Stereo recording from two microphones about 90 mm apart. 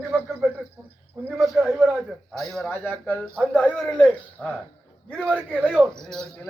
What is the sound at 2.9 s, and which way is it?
A man's voice, 15° left (ahead or behind).